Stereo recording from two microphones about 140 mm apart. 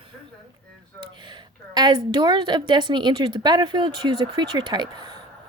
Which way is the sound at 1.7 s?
30° right (ahead or behind).